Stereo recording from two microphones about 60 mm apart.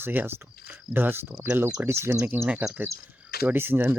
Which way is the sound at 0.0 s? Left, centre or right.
Right.